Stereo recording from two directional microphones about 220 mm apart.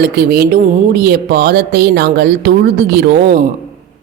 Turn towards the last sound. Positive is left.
turn(degrees=-45)  # may be behind; listen again after turning